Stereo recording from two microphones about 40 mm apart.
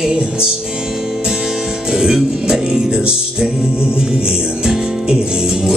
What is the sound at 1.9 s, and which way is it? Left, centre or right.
Music, centre.